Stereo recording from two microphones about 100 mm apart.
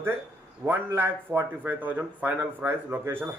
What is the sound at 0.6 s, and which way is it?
Speech, 20° right (ahead or behind).